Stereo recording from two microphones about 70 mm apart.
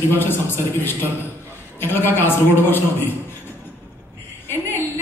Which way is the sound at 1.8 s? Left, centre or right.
Left.